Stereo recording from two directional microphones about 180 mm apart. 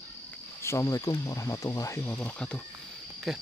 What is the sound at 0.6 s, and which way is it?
Speech, 15° left (ahead or behind).